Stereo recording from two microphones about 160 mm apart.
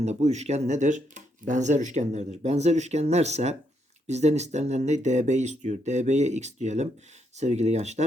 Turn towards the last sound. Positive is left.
turn(degrees=-45)  # may be behind; listen again after turning